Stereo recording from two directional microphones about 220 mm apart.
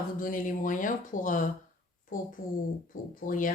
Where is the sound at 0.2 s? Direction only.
40° left (ahead or behind).